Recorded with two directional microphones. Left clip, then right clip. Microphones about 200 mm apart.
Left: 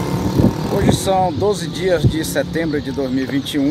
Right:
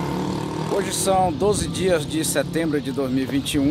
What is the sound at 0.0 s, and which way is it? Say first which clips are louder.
Vehicle: left 7 dB; 50° left (ahead or behind).